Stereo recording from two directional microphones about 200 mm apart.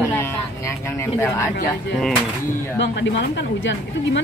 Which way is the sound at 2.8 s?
60° left (ahead or behind).